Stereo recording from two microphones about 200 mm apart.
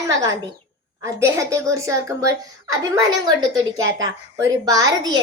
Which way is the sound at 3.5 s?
75° right (ahead or behind).